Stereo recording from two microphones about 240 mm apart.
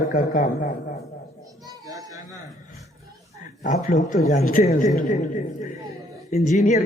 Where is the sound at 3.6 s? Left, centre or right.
Left.